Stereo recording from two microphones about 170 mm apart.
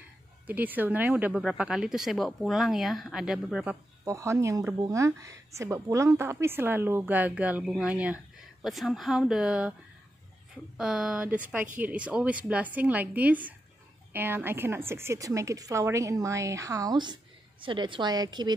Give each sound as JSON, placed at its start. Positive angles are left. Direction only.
{"t": 0.5, "sound": "speech", "side_deg": -10}
{"t": 4.0, "sound": "speech", "side_deg": -15}
{"t": 10.8, "sound": "speech", "side_deg": -5}